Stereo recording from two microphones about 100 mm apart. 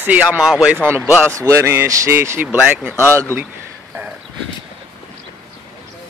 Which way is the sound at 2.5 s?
15° right (ahead or behind).